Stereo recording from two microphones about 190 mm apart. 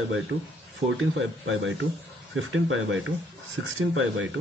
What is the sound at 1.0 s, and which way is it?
Speech, 90° right.